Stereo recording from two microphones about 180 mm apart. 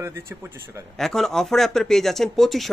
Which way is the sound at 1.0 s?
Centre (ahead or behind).